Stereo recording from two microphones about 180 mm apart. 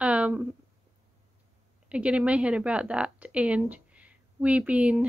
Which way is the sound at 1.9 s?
5° right (ahead or behind).